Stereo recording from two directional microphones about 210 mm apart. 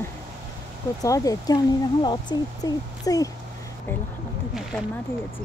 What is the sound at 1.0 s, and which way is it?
Speech, 15° left (ahead or behind).